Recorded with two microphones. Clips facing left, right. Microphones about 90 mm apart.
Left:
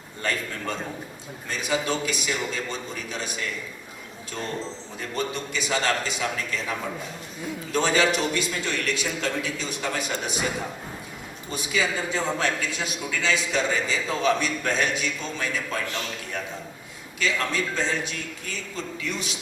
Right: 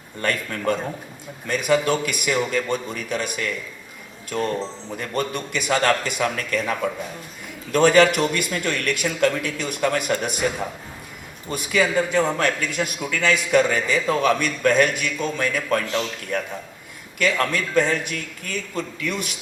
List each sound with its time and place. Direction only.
0.2 s a man's voice: 55° right (ahead or behind)
4.9 s a man's voice: 55° right (ahead or behind)
11.5 s a man's voice: 60° right (ahead or behind)
17.2 s a man's voice: 60° right (ahead or behind)